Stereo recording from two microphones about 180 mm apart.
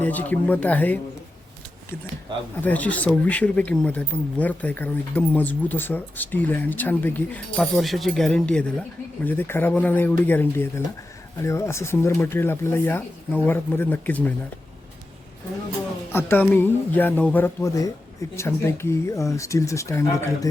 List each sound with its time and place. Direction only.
0.0 s speech: 10° left (ahead or behind)
2.6 s speech: 10° left (ahead or behind)
16.1 s speech: 10° left (ahead or behind)